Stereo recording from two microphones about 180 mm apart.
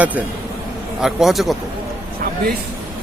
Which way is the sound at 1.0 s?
Centre (ahead or behind).